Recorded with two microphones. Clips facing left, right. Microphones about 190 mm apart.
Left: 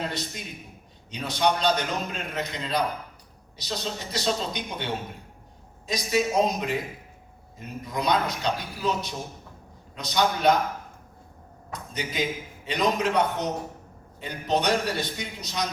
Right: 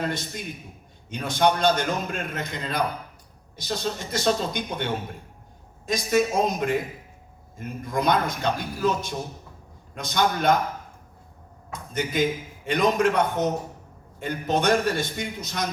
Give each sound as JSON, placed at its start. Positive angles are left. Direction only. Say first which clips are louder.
{"t": 1.1, "sound": "a man's voice", "louder": "right 3 dB", "side_deg": -50}
{"t": 11.7, "sound": "a man's voice", "louder": "right 5 dB", "side_deg": -50}